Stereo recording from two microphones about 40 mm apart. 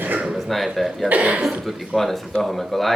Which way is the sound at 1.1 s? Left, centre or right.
Right.